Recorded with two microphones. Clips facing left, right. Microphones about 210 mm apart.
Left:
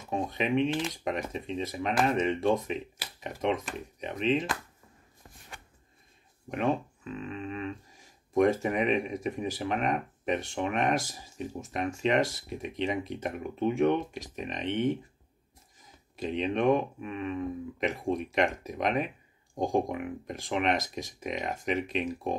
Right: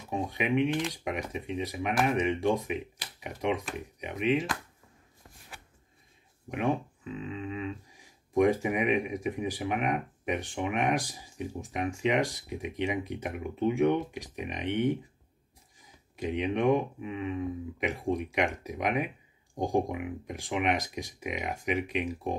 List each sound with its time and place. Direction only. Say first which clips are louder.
0.1 s speech: left 1 dB; 15° right (ahead or behind)
6.5 s speech: left 1 dB; 15° right (ahead or behind)